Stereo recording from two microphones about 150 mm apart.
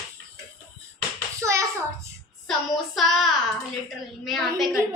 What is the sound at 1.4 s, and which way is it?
Hands, 20° right (ahead or behind).